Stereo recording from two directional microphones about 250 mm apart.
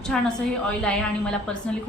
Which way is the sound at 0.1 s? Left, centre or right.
Centre.